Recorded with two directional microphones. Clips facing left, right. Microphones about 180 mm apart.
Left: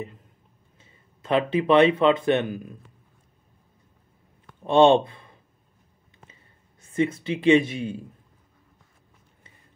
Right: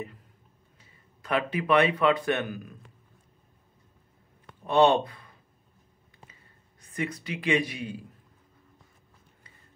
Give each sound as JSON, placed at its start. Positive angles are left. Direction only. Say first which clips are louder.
{"t": 0.7, "sound": "speech", "louder": "left 2 dB", "side_deg": 25}
{"t": 4.6, "sound": "speech", "louder": "left 5 dB", "side_deg": 25}
{"t": 6.8, "sound": "speech", "louder": "left 9 dB", "side_deg": 25}